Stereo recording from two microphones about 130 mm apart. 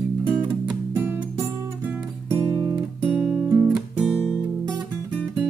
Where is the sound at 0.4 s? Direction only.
15° right (ahead or behind).